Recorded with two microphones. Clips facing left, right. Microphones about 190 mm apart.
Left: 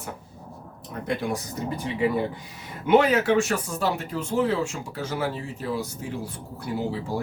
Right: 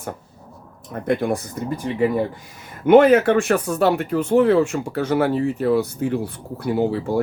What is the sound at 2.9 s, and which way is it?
Speech, 55° right (ahead or behind).